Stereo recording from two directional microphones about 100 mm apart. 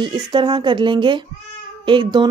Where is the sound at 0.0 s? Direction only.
50° right (ahead or behind).